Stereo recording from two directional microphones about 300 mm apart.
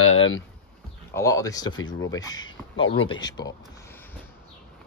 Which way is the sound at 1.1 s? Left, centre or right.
Centre.